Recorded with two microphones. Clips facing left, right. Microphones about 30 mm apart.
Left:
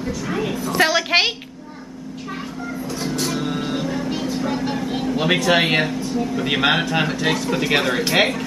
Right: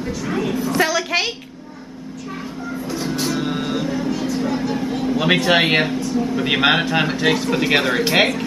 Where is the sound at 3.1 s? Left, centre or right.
Centre.